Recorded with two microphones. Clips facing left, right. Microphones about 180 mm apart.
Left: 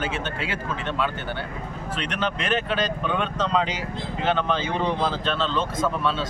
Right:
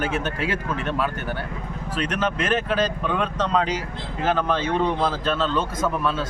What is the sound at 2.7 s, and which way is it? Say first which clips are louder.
A man's voice: right 2 dB; centre (ahead or behind).